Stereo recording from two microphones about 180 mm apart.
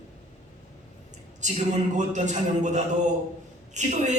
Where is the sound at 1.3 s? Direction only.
40° right (ahead or behind).